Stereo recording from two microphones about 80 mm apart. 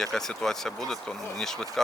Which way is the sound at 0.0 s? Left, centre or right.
Centre.